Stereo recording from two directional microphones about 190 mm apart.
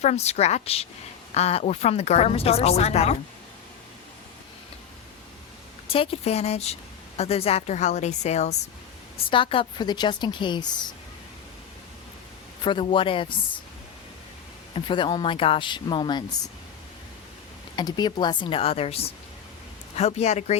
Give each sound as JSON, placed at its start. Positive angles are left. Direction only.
{"t": 0.0, "sound": "speech", "side_deg": 35}
{"t": 5.9, "sound": "a woman's voice", "side_deg": 30}
{"t": 12.6, "sound": "a woman's voice", "side_deg": 25}
{"t": 14.8, "sound": "a woman's voice", "side_deg": 25}
{"t": 17.7, "sound": "a woman's voice", "side_deg": 20}